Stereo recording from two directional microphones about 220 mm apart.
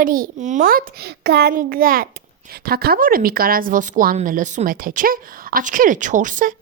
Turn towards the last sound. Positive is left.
turn(degrees=-35)  # may be behind; listen again after turning